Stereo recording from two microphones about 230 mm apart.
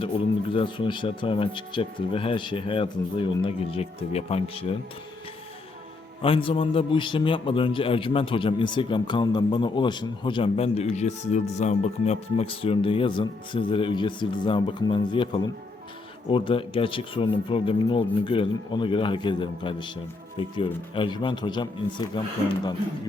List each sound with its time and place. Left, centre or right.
0.5 s a man's voice: left
6.2 s a man's voice: left
20.9 s a man's voice: left